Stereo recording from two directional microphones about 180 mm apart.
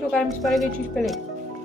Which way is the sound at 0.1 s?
Centre (ahead or behind).